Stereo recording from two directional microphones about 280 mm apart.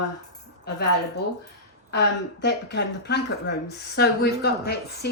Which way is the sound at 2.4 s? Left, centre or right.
Left.